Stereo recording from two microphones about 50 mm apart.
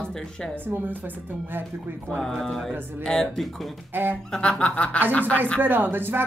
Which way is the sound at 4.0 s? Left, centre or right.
Right.